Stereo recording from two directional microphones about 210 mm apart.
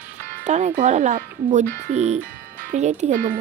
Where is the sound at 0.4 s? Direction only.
35° right (ahead or behind).